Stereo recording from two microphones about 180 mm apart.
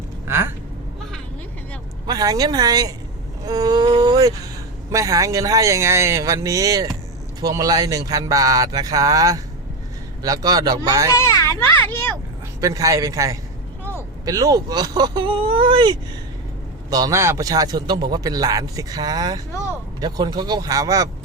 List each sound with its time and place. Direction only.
0.3 s a sound: 15° right (ahead or behind)
2.0 s a man's voice: 20° right (ahead or behind)
11.2 s children playing: 15° left (ahead or behind)
12.5 s a man's voice: 20° right (ahead or behind)